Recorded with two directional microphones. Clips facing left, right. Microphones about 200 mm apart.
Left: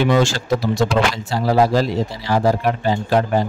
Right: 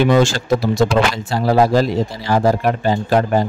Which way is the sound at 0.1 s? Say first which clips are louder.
Right 3 dB; 45° right (ahead or behind).